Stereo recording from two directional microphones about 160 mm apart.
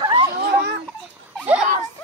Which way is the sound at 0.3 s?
80° right.